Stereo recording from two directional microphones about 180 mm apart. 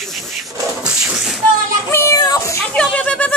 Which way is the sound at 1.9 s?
15° left (ahead or behind).